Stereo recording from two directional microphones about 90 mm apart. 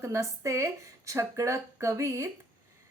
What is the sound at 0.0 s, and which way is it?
Speech, 35° right (ahead or behind).